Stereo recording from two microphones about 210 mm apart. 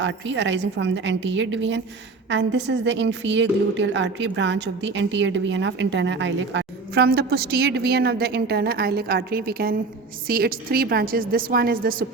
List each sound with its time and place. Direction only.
0.0 s a woman's voice: 60° right (ahead or behind); by 12.0 s 45° right (ahead or behind)